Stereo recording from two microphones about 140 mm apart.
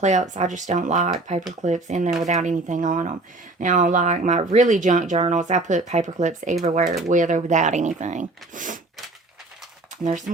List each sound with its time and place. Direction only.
0.0 s speech: 60° right (ahead or behind)
9.9 s speech: 60° right (ahead or behind)